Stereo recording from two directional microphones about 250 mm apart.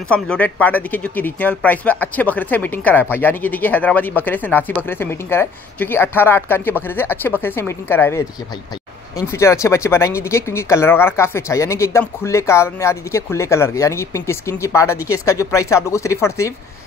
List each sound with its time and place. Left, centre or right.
0.1 s speech: centre